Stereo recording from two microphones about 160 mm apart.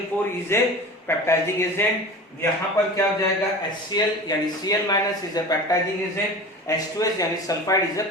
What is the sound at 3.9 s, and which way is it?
Speech, 25° left (ahead or behind).